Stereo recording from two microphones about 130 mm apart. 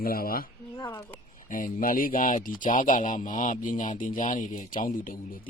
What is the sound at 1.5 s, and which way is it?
Speech, 90° left.